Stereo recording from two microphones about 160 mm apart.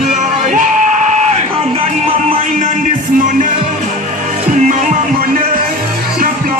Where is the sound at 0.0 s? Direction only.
50° right (ahead or behind).